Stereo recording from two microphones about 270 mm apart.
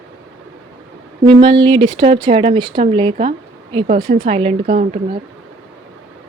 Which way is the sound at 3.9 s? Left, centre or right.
Right.